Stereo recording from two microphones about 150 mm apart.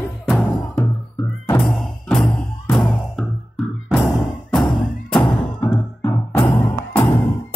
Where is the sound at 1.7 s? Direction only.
Centre (ahead or behind).